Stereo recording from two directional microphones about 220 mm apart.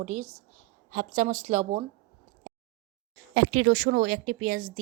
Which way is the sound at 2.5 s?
35° right (ahead or behind).